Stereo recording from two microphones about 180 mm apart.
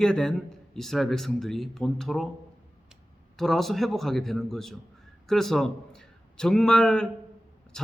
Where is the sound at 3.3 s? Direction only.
Centre (ahead or behind).